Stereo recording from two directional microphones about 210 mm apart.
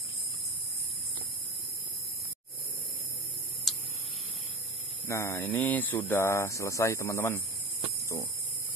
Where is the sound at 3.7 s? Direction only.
Centre (ahead or behind).